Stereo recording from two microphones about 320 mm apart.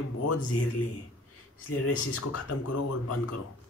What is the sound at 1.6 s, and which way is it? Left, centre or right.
Speech, left.